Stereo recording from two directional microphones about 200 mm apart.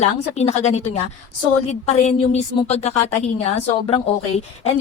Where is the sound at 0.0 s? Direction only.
35° left (ahead or behind).